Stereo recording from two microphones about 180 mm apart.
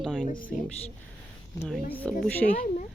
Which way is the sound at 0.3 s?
50° left (ahead or behind).